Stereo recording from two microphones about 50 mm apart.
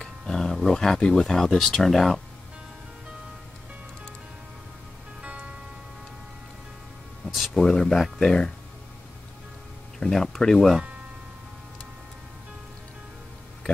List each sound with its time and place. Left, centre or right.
0.0 s roaring cats: centre
0.7 s speech: centre
5.2 s music: right
7.2 s music: centre
8.2 s speech: centre
9.9 s speech: centre